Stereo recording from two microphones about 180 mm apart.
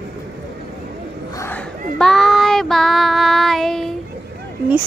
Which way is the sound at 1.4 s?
5° left (ahead or behind).